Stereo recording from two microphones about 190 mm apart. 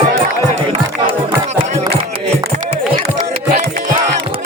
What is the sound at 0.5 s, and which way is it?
Music, 30° right (ahead or behind).